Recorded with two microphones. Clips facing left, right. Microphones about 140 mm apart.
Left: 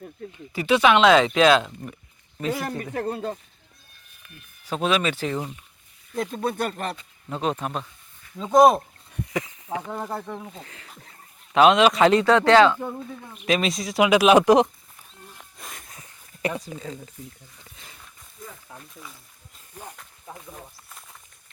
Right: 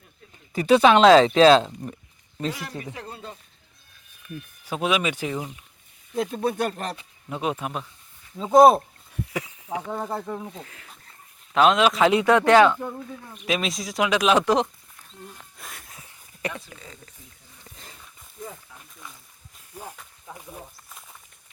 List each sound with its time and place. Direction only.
0.5 s speech: 40° right (ahead or behind)
2.5 s speech: 50° left (ahead or behind)
4.6 s speech: 10° right (ahead or behind)
12.2 s speech: 15° right (ahead or behind)
12.7 s speech: 5° left (ahead or behind)
15.4 s a sound: centre (ahead or behind)
16.6 s speech: 15° left (ahead or behind)
18.7 s speech: 35° left (ahead or behind)
19.7 s speech: 5° right (ahead or behind)
20.3 s snake: 5° right (ahead or behind)